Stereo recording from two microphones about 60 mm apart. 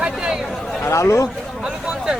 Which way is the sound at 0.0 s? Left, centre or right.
Centre.